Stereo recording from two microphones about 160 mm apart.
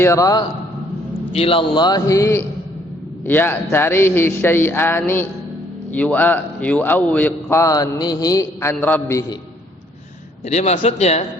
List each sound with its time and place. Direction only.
0.0 s a man's voice: 15° left (ahead or behind)
1.3 s a man's voice: 35° left (ahead or behind); by 9.2 s 15° left (ahead or behind)
10.4 s a man's voice: 45° left (ahead or behind)